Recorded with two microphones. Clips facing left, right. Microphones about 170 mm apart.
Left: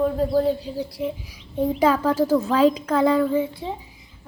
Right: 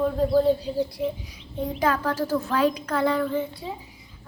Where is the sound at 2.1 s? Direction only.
10° left (ahead or behind).